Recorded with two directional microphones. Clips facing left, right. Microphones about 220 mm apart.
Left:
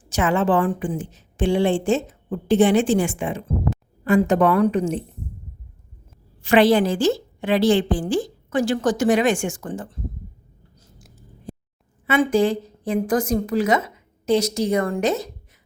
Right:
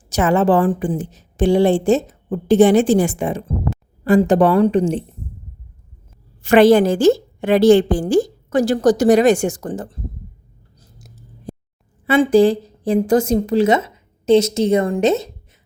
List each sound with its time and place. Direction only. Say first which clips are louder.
0.1 s a woman's voice: right 4 dB; 40° right (ahead or behind)
6.4 s a woman's voice: right 5 dB; 45° right (ahead or behind)
10.8 s a sound: right 4 dB; 40° right (ahead or behind)
12.0 s a woman's voice: right 6 dB; 35° right (ahead or behind)